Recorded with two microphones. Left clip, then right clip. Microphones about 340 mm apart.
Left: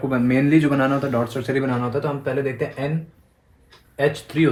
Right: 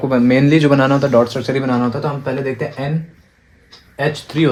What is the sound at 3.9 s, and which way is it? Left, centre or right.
Speech, centre.